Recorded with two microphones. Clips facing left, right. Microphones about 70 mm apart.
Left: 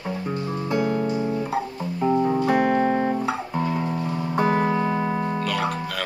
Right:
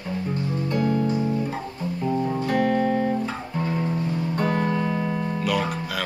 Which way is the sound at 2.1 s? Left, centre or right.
Left.